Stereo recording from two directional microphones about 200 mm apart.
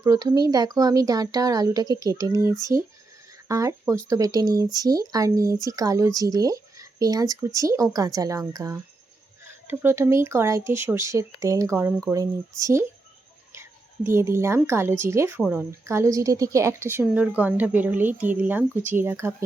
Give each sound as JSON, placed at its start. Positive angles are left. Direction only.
{"t": 0.0, "sound": "speech", "side_deg": -20}